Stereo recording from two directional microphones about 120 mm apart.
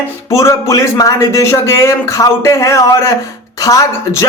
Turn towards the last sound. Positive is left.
turn(degrees=30)  # may be behind; listen again after turning